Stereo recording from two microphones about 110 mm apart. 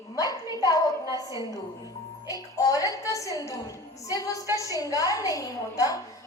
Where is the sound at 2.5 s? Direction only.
30° left (ahead or behind).